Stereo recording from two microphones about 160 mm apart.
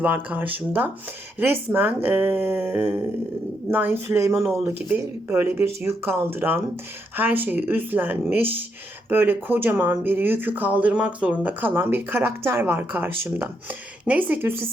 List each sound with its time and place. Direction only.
0.0 s speech: 10° right (ahead or behind)